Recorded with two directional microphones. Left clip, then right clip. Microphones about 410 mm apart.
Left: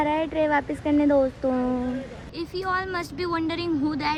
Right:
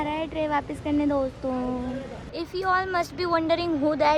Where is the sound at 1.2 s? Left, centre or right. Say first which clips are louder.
Left 4 dB; left.